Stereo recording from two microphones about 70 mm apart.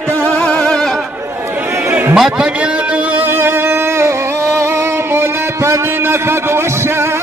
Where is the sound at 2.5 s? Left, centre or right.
Centre.